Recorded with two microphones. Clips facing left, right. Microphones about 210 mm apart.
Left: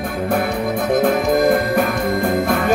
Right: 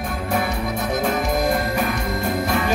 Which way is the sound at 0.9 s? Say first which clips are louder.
Left 7 dB; 55° left (ahead or behind).